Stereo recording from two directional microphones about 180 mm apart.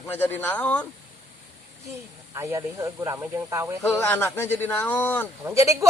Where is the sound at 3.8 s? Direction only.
10° left (ahead or behind).